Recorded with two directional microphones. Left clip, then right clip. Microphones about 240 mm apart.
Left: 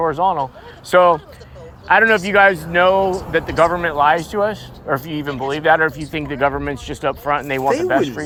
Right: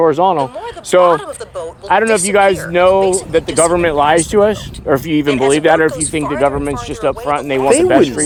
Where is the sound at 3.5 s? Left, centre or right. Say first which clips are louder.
Right 3 dB; right.